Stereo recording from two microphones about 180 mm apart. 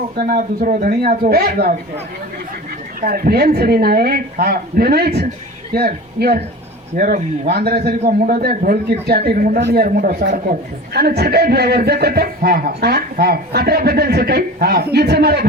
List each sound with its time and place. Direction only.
0.2 s speech: 55° right (ahead or behind)
3.0 s speech: 60° right (ahead or behind)
6.9 s a man's voice: 50° right (ahead or behind)
9.6 s speech: 70° right (ahead or behind)
9.8 s a man's voice: 55° right (ahead or behind)